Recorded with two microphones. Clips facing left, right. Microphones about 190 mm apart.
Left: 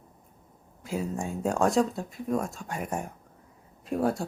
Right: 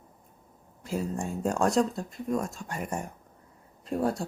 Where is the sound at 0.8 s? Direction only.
Centre (ahead or behind).